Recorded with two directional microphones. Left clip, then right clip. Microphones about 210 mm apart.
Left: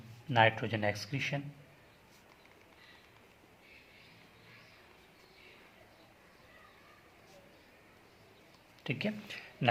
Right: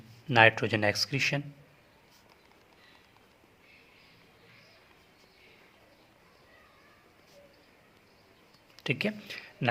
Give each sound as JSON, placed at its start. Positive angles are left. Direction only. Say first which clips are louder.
{"t": 0.3, "sound": "speech", "louder": "right 6 dB", "side_deg": -40}
{"t": 8.8, "sound": "speech", "louder": "right 6 dB", "side_deg": -40}